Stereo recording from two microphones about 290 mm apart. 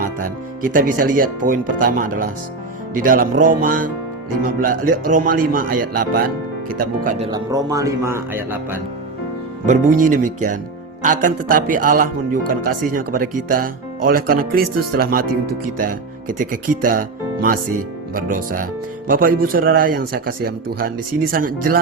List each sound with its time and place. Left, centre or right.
0.2 s speech: right
7.3 s speech: centre
9.6 s speech: right